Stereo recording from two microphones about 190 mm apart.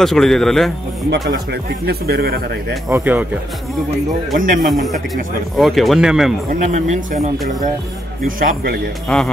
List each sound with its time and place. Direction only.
0.0 s speech: centre (ahead or behind)
1.3 s speech: 55° right (ahead or behind)
2.9 s speech: 10° right (ahead or behind)
4.4 s speech: 45° right (ahead or behind)
4.6 s speech: centre (ahead or behind)
6.6 s speech: 40° right (ahead or behind)
9.1 s speech: 5° left (ahead or behind)